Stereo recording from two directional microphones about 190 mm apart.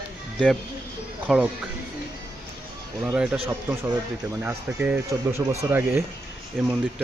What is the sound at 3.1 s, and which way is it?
Speech, 5° right (ahead or behind).